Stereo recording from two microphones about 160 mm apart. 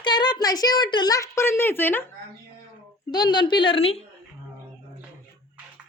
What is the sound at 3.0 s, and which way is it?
Speech, 25° left (ahead or behind).